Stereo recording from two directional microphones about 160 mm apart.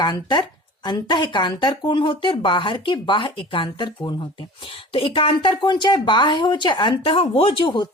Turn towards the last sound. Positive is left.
turn(degrees=30)  # may be behind; listen again after turning